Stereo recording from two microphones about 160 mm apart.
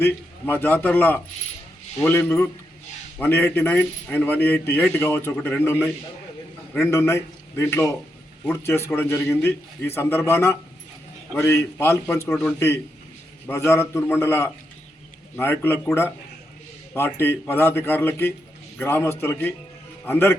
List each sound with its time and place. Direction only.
0.0 s a man's voice: 15° left (ahead or behind)